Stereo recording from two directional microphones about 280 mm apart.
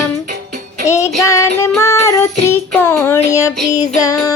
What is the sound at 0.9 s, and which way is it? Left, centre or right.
Child singing, centre.